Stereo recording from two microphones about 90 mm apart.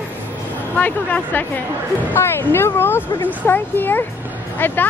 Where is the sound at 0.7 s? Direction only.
20° left (ahead or behind).